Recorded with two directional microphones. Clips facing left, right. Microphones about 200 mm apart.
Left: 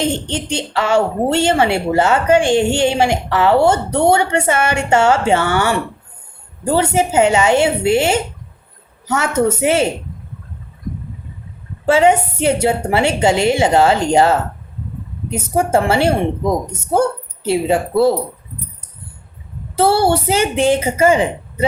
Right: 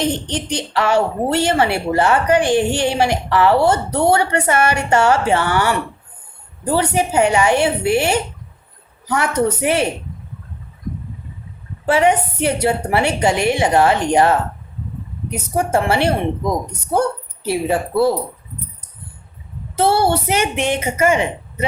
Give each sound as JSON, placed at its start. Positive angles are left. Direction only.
{"t": 0.0, "sound": "a woman's voice", "side_deg": 25}
{"t": 11.9, "sound": "a woman's voice", "side_deg": 25}
{"t": 19.7, "sound": "a woman's voice", "side_deg": 30}